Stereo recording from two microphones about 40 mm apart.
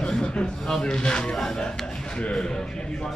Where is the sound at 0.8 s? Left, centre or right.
Left.